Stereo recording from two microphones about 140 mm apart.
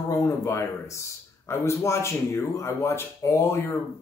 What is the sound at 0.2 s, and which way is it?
Speech, 20° left (ahead or behind).